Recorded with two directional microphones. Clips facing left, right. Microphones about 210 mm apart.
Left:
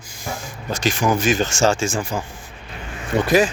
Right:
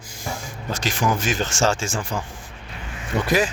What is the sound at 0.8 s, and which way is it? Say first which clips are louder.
Speech: left 4 dB; 15° left (ahead or behind).